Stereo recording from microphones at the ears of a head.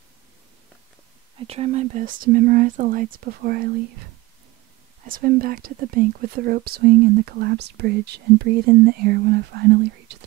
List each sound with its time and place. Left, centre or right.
1.3 s speech: right